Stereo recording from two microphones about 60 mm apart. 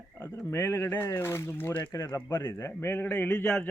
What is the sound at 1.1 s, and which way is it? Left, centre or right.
Speech, left.